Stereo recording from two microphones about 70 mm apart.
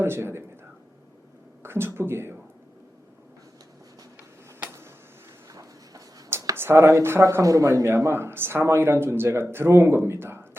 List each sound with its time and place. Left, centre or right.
0.0 s speech: right
1.6 s speech: right
5.5 s a sound: right
6.6 s speech: right